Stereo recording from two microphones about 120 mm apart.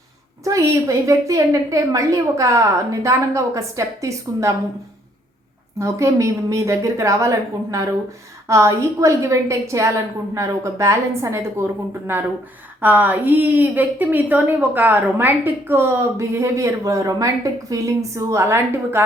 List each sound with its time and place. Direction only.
0.4 s a woman's voice: 25° right (ahead or behind)
5.8 s a woman's voice: 25° right (ahead or behind)